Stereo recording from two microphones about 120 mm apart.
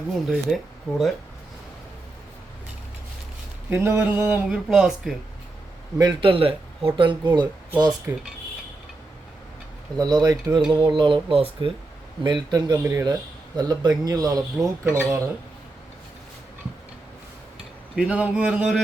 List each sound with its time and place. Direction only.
0.3 s speech: centre (ahead or behind)
3.7 s speech: 20° right (ahead or behind)
4.4 s speech: 5° right (ahead or behind)
6.0 s a man's voice: 40° right (ahead or behind)
8.1 s speech: 25° right (ahead or behind)
10.0 s a man's voice: 30° right (ahead or behind); by 11.7 s 50° right (ahead or behind)
12.2 s speech: 40° right (ahead or behind)
12.7 s speech: 20° right (ahead or behind)
13.6 s speech: 35° right (ahead or behind)
17.9 s speech: 10° right (ahead or behind)